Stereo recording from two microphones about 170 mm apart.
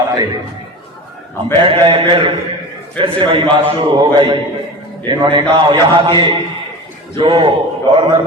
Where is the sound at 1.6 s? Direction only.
30° right (ahead or behind).